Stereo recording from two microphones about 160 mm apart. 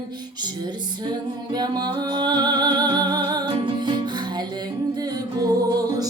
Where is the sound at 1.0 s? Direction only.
25° right (ahead or behind).